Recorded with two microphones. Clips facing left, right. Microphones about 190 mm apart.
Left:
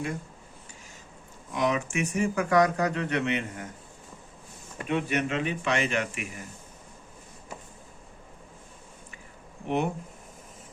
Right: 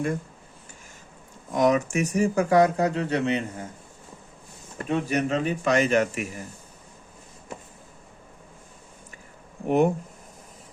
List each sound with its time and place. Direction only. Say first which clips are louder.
1.5 s speech: right 6 dB; 45° right (ahead or behind)
4.8 s speech: right 3 dB; 35° right (ahead or behind)
9.6 s speech: right 7 dB; 45° right (ahead or behind)